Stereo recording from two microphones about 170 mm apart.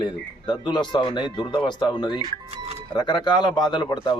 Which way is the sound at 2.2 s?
35° right (ahead or behind).